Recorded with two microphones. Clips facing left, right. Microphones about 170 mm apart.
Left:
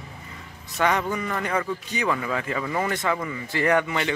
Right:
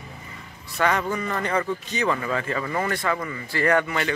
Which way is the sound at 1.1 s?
10° left (ahead or behind).